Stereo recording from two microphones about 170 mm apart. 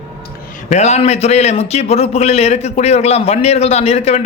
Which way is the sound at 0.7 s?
40° left (ahead or behind).